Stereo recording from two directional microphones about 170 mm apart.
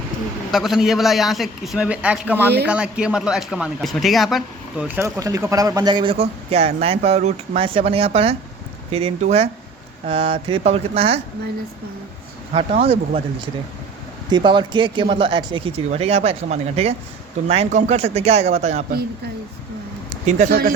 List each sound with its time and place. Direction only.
0.5 s a man's voice: centre (ahead or behind); by 11.2 s 35° right (ahead or behind)
12.8 s speech: 35° right (ahead or behind)
20.1 s a sound: 45° right (ahead or behind)
20.5 s speech: 65° right (ahead or behind)